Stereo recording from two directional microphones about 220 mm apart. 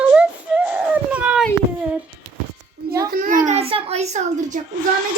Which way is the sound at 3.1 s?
40° right (ahead or behind).